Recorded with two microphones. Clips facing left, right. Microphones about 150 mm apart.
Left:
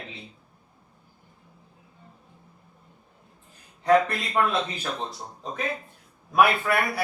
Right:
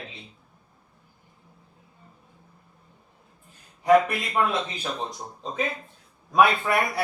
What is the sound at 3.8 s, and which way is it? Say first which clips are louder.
Speech: right 2 dB; 10° right (ahead or behind).